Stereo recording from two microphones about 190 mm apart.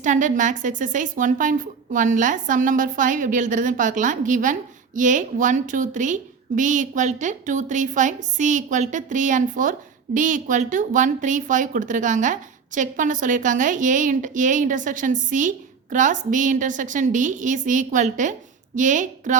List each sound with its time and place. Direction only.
0.0 s a woman's voice: 40° right (ahead or behind)